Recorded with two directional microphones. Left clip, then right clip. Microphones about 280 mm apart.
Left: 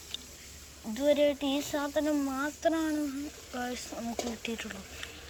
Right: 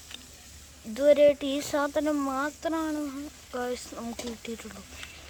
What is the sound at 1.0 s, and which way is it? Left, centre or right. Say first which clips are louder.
A woman's voice: right 6 dB; centre.